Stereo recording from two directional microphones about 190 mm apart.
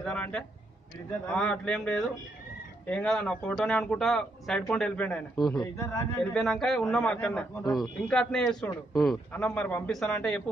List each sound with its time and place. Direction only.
0.0 s a sound: 5° left (ahead or behind)
1.3 s a man's voice: 5° left (ahead or behind)
6.3 s speech: centre (ahead or behind)